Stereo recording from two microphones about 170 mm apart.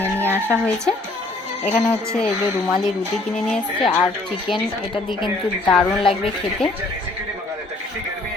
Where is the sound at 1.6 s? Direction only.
40° left (ahead or behind).